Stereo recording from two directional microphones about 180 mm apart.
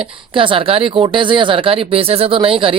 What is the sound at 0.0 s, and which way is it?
Speech, 30° right (ahead or behind).